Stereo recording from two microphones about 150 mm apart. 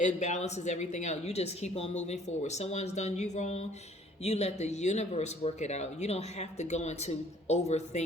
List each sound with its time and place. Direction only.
0.0 s speech: 50° left (ahead or behind)